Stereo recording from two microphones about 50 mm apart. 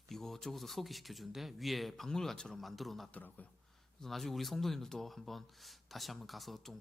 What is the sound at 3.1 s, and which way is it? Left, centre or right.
Speech, left.